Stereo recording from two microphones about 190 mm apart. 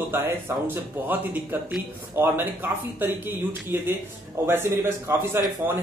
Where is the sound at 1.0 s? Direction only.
10° right (ahead or behind).